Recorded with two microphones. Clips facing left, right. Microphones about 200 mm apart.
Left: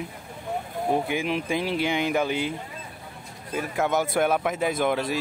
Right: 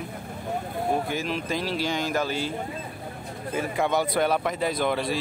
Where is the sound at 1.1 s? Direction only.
15° left (ahead or behind).